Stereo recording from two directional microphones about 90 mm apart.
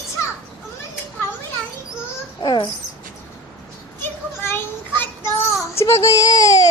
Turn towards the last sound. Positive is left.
turn(degrees=45)  # may be behind; listen again after turning